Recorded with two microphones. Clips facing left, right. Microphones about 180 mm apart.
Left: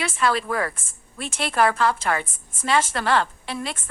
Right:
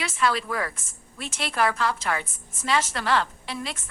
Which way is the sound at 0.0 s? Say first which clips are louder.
Left 2 dB; 55° left (ahead or behind).